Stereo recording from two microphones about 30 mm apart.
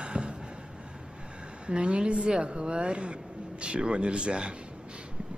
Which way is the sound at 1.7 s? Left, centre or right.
Right.